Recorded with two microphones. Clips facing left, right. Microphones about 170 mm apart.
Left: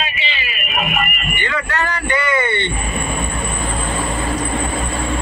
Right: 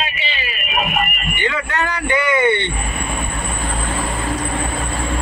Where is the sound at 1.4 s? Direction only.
15° right (ahead or behind).